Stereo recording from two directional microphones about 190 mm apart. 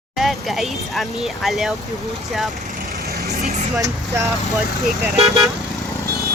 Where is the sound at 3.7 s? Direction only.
15° right (ahead or behind).